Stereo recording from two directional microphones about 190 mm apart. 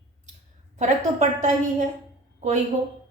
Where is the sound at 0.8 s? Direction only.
40° right (ahead or behind).